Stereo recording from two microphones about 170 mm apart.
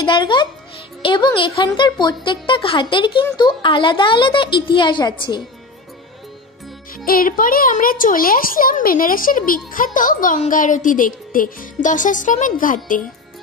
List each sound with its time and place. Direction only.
0.0 s a woman's voice: 30° left (ahead or behind)
7.1 s a child's voice: 55° left (ahead or behind)
9.9 s music: 50° left (ahead or behind)